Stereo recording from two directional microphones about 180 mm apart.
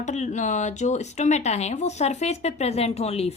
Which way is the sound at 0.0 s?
40° left (ahead or behind).